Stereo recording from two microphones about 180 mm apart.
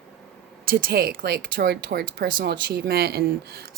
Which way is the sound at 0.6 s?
50° right (ahead or behind).